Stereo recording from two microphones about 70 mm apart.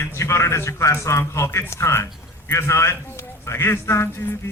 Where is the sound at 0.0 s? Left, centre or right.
Left.